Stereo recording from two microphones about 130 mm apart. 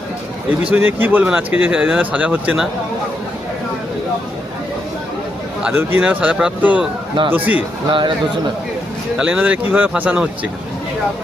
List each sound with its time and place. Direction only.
0.7 s speech: 15° right (ahead or behind)
5.6 s speech: 10° right (ahead or behind)
7.9 s speech: 40° right (ahead or behind)
9.1 s speech: 5° right (ahead or behind)